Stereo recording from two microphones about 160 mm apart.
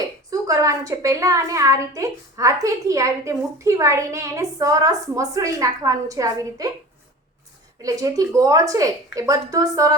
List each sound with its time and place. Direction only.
0.3 s a woman's voice: 20° right (ahead or behind)
7.8 s a woman's voice: 20° right (ahead or behind)